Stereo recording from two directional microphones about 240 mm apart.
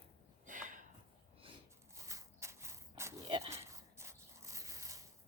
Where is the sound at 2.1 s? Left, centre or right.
Centre.